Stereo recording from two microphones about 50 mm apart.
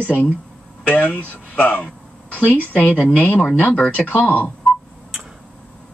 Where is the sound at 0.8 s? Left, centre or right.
Left.